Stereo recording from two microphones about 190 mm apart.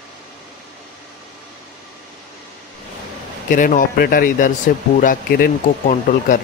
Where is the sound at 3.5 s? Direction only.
45° left (ahead or behind).